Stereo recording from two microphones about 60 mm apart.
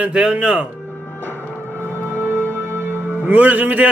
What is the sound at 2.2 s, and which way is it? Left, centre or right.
Music, right.